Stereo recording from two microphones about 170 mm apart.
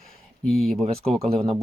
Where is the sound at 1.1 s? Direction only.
35° right (ahead or behind).